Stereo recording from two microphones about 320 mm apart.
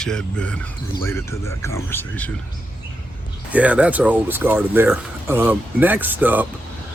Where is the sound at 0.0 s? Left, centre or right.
Centre.